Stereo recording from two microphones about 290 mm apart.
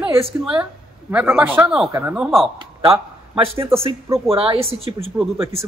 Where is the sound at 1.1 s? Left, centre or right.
Centre.